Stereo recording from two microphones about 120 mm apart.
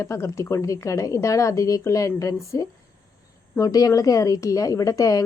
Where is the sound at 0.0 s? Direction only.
25° left (ahead or behind).